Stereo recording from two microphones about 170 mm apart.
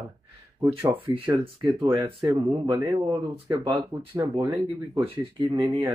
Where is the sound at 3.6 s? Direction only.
30° right (ahead or behind).